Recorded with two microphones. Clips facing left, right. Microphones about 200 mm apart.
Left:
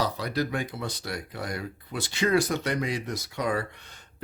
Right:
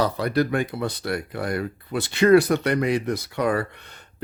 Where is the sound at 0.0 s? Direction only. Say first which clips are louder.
Right 6 dB; 55° right (ahead or behind).